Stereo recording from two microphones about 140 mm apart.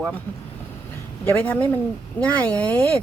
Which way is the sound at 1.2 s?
15° left (ahead or behind).